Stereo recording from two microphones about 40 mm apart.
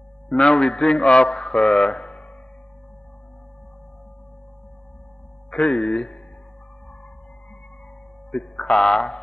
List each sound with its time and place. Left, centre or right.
0.3 s a man's voice: left
5.5 s speech: left
8.5 s a man's voice: left